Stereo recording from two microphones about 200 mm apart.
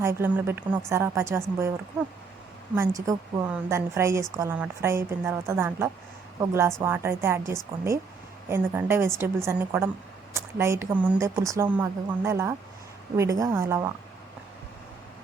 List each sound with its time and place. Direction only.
0.0 s a woman's voice: 10° right (ahead or behind)
2.7 s a woman's voice: 15° right (ahead or behind)